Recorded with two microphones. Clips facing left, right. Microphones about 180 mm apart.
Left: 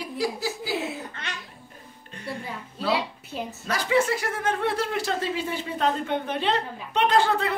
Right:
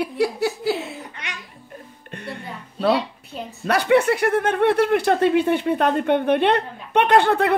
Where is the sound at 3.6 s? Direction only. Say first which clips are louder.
Right 7 dB; 65° right (ahead or behind).